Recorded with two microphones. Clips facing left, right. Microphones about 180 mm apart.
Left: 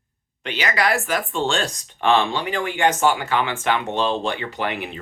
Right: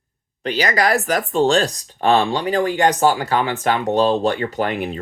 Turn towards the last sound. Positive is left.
turn(degrees=-45)  # may be behind; listen again after turning